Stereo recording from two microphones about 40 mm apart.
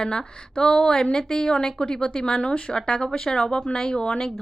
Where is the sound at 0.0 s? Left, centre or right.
Centre.